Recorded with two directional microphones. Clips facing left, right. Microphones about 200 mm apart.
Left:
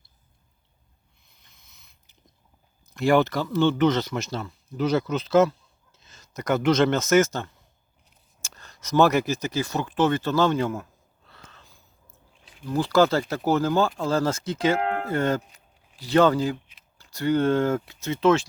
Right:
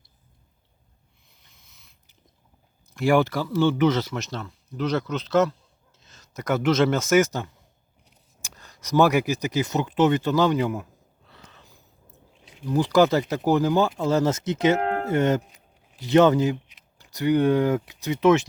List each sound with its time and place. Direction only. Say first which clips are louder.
2.9 s speech: even; 10° right (ahead or behind)
11.3 s a sound: right 1 dB; 15° right (ahead or behind)
12.5 s speech: right 2 dB; 20° right (ahead or behind)
14.8 s music: right 1 dB; 40° right (ahead or behind)
15.0 s speech: right 3 dB; 20° right (ahead or behind)